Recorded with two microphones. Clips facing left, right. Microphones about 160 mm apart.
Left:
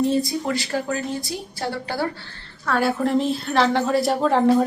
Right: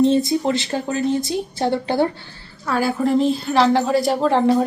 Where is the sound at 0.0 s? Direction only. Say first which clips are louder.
Right 5 dB; 25° right (ahead or behind).